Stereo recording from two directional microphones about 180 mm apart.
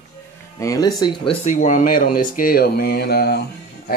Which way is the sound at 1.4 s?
45° left (ahead or behind).